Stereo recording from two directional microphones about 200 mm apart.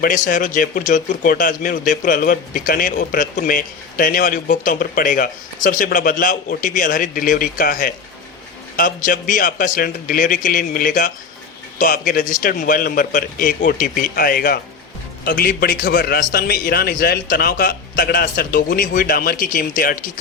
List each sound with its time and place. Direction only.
0.0 s speech: 45° left (ahead or behind)